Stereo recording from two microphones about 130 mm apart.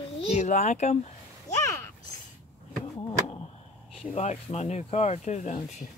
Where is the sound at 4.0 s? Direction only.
55° left (ahead or behind).